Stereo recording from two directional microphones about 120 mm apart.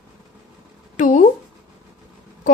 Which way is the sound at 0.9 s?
90° left.